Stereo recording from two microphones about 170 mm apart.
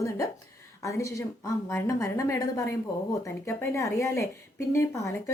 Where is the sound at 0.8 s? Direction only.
20° left (ahead or behind).